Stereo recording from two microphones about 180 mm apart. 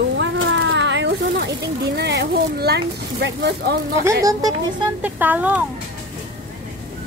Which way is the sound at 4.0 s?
20° right (ahead or behind).